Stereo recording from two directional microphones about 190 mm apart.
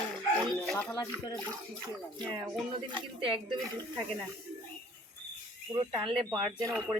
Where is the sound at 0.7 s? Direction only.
10° left (ahead or behind).